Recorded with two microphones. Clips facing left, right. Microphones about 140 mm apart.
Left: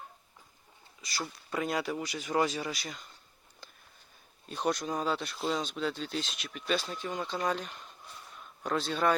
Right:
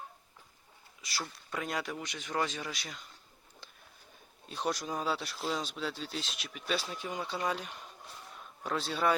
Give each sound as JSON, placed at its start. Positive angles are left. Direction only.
{"t": 1.0, "sound": "speech", "side_deg": 0}
{"t": 4.4, "sound": "speech", "side_deg": 0}